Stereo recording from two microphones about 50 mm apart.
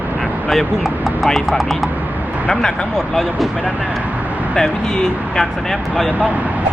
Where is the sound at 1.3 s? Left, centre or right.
Centre.